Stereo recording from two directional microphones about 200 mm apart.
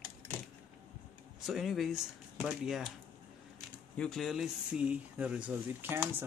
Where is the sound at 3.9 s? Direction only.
5° left (ahead or behind).